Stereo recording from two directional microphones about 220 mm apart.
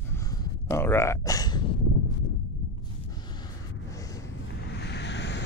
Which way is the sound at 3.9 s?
15° left (ahead or behind).